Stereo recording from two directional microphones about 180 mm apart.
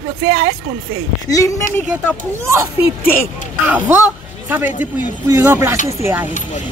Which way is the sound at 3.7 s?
10° right (ahead or behind).